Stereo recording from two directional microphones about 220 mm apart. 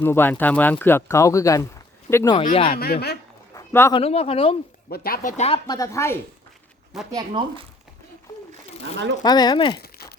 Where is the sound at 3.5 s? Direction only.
10° left (ahead or behind).